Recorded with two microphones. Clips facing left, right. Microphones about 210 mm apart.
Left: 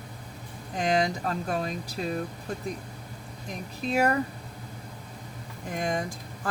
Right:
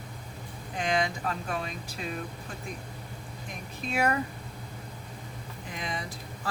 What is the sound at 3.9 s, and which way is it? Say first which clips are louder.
Speech: left 3 dB; 40° left (ahead or behind).